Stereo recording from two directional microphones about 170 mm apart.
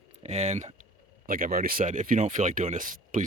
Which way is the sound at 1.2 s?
55° right (ahead or behind).